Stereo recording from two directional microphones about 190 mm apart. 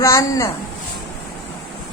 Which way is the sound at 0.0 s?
15° left (ahead or behind).